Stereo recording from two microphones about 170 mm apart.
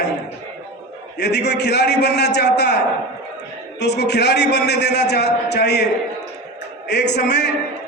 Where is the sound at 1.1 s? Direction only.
75° left (ahead or behind).